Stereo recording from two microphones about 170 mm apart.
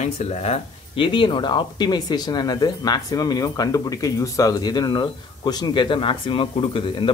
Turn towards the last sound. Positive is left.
turn(degrees=30)  # may be behind; listen again after turning